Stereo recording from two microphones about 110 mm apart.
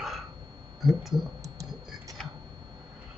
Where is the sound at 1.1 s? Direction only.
40° right (ahead or behind).